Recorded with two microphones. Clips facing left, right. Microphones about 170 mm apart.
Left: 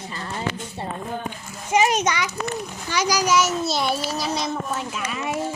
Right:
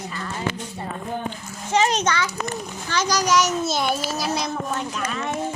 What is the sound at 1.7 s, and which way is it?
A child's voice, 10° left (ahead or behind).